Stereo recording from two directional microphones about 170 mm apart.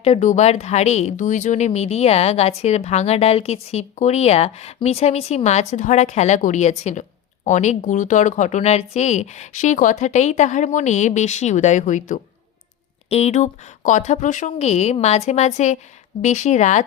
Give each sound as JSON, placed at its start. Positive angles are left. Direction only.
{"t": 0.0, "sound": "speech", "side_deg": 40}